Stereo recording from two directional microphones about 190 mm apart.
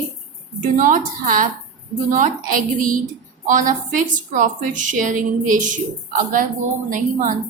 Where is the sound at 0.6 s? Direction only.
45° right (ahead or behind).